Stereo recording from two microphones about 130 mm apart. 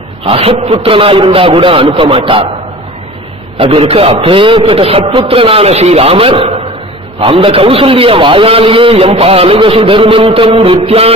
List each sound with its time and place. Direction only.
0.3 s a man's voice: 50° right (ahead or behind)
3.5 s a man's voice: 45° right (ahead or behind)